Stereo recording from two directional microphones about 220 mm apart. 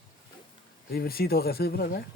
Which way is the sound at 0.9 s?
45° left (ahead or behind).